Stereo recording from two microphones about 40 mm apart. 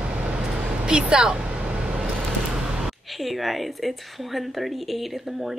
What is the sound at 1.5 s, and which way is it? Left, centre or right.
Vehicle, right.